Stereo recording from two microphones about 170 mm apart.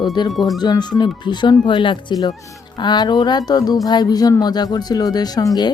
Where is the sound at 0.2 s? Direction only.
25° left (ahead or behind).